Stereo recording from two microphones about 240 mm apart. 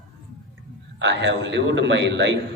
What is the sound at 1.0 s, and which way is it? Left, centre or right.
A man's voice, right.